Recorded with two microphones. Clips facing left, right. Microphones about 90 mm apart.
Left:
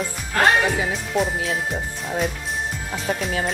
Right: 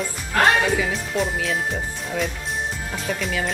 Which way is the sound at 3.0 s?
35° left (ahead or behind).